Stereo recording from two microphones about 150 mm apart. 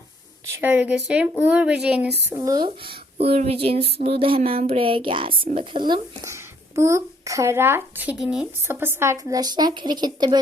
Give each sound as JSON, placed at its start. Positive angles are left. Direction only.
{"t": 0.5, "sound": "a woman's voice", "side_deg": -15}
{"t": 2.2, "sound": "speech", "side_deg": -20}
{"t": 2.6, "sound": "speech", "side_deg": -35}
{"t": 6.3, "sound": "a child's voice", "side_deg": -20}